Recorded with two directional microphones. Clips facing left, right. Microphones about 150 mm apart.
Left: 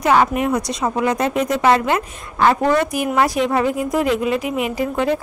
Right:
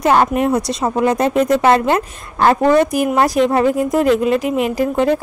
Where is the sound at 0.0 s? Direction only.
35° right (ahead or behind).